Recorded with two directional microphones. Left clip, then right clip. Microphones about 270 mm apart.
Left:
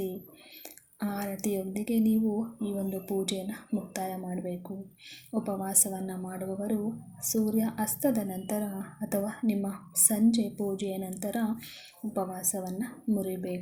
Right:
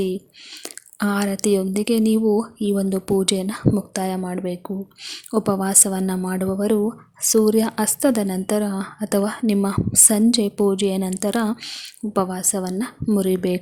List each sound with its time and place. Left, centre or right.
0.6 s a woman's voice: right